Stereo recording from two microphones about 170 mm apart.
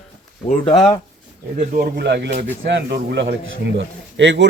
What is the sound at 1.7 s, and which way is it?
A man's voice, 70° right (ahead or behind).